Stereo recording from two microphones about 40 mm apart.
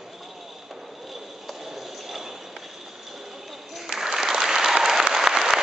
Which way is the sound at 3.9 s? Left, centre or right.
Centre.